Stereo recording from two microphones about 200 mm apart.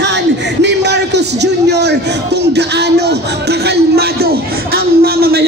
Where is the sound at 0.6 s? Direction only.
60° right (ahead or behind).